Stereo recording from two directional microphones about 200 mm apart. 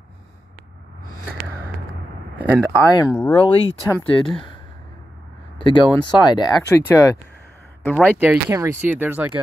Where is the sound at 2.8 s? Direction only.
20° left (ahead or behind).